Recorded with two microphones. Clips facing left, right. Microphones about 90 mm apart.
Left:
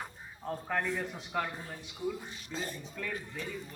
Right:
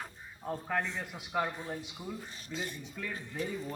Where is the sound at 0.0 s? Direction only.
5° right (ahead or behind).